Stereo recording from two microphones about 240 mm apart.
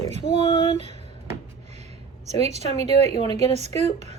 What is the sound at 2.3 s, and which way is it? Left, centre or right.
A woman's voice, right.